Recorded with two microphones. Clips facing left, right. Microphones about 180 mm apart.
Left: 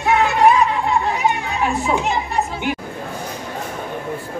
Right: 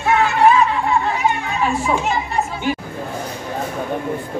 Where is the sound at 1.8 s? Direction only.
15° left (ahead or behind).